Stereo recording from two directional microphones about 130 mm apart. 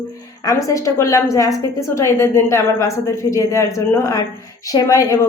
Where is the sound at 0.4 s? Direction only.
25° left (ahead or behind).